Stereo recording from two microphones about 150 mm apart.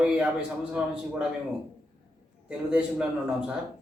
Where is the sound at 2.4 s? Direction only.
5° right (ahead or behind).